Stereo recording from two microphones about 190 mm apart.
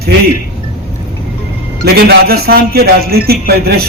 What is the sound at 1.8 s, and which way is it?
Speech, 55° right (ahead or behind).